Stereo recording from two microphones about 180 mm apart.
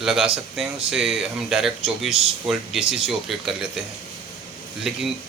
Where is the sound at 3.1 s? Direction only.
Centre (ahead or behind).